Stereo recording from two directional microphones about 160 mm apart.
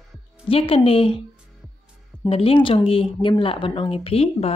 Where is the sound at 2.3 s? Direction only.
35° left (ahead or behind).